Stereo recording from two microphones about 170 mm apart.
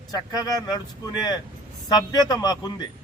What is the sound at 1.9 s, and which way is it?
A man's voice, 25° left (ahead or behind).